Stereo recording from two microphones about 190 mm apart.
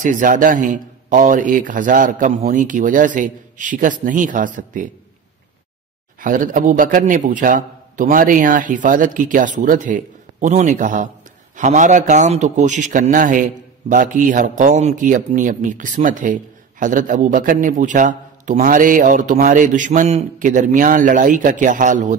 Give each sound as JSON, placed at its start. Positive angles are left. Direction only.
{"t": 0.0, "sound": "a man's voice", "side_deg": -45}
{"t": 6.2, "sound": "a man's voice", "side_deg": -45}